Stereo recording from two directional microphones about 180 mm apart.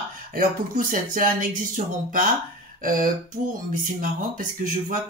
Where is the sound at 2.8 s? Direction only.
50° right (ahead or behind).